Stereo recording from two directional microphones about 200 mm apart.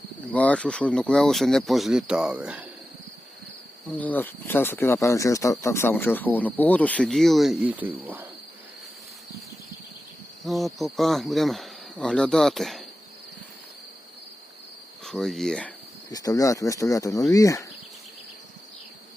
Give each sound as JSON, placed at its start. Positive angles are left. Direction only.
{"t": 0.3, "sound": "speech", "side_deg": 5}
{"t": 3.9, "sound": "speech", "side_deg": 10}
{"t": 10.4, "sound": "speech", "side_deg": 0}
{"t": 15.0, "sound": "speech", "side_deg": 0}
{"t": 16.0, "sound": "speech", "side_deg": 20}